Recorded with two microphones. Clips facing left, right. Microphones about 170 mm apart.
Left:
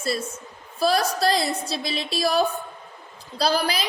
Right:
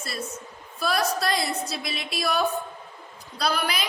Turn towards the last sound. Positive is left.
turn(degrees=30)  # may be behind; listen again after turning